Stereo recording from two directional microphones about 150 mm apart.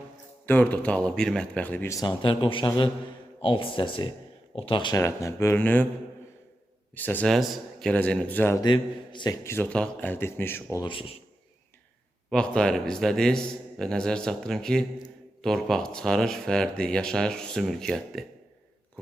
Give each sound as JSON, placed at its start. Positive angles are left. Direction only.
{"t": 0.4, "sound": "a man's voice", "side_deg": 10}
{"t": 4.9, "sound": "speech", "side_deg": 20}
{"t": 6.9, "sound": "speech", "side_deg": 10}
{"t": 8.6, "sound": "a man's voice", "side_deg": 30}
{"t": 9.4, "sound": "speech", "side_deg": 15}
{"t": 10.8, "sound": "a man's voice", "side_deg": 35}
{"t": 12.3, "sound": "speech", "side_deg": 5}